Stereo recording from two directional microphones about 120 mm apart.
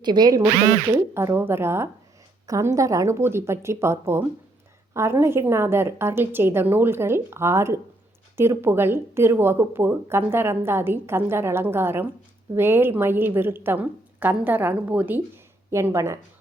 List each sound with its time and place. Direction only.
0.0 s speech: 35° right (ahead or behind)
0.9 s a woman's voice: 20° right (ahead or behind)